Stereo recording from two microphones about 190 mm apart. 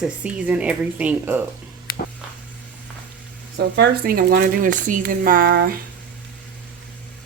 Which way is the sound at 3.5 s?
65° right (ahead or behind).